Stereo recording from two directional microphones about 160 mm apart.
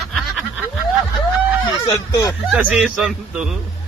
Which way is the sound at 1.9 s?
20° left (ahead or behind).